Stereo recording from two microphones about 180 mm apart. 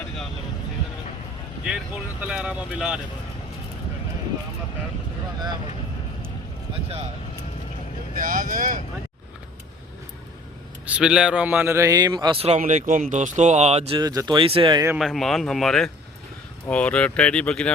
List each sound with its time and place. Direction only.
2.2 s speech: 5° right (ahead or behind)
8.2 s speech: 50° right (ahead or behind)
10.8 s a man's voice: 5° right (ahead or behind); by 14.8 s 25° right (ahead or behind)
14.9 s speech: centre (ahead or behind)